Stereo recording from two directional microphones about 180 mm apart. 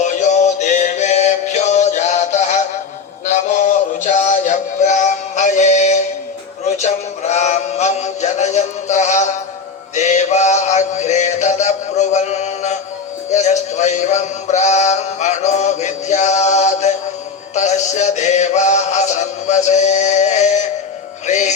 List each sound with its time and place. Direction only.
0.0 s music: 40° left (ahead or behind)
6.7 s a sound: 40° left (ahead or behind)
9.9 s music: 40° left (ahead or behind)
13.3 s synthetic singing: 40° left (ahead or behind)
17.5 s music: 40° left (ahead or behind)